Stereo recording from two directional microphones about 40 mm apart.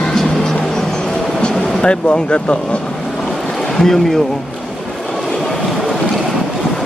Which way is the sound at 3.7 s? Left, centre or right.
Centre.